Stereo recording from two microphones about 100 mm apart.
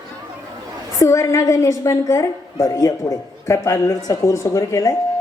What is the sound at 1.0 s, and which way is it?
A woman's voice, 30° left (ahead or behind).